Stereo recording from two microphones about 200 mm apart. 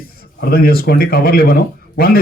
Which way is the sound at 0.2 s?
50° left (ahead or behind).